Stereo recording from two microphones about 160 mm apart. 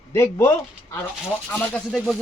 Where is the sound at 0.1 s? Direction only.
15° left (ahead or behind).